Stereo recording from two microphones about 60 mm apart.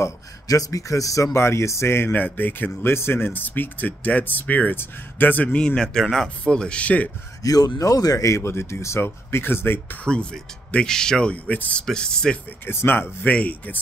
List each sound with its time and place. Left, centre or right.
0.5 s speech: left
1.3 s speech: left
2.1 s speech: left
7.4 s speech: left
8.4 s speech: left
10.0 s speech: centre
11.3 s speech: left
11.8 s speech: centre
12.6 s speech: left